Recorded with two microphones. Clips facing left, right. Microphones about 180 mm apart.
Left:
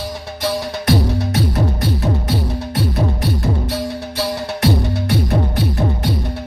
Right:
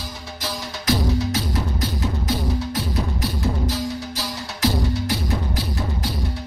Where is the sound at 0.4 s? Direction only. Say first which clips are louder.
Left 10 dB; 60° left (ahead or behind).